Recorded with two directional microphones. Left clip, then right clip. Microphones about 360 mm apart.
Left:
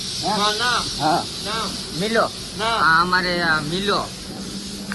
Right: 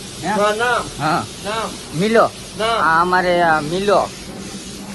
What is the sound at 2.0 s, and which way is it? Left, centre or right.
Speech, right.